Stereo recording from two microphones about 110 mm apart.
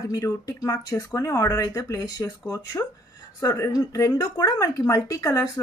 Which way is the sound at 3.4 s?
30° left (ahead or behind).